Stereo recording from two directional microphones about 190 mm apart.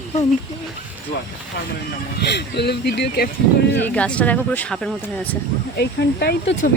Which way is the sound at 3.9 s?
5° left (ahead or behind).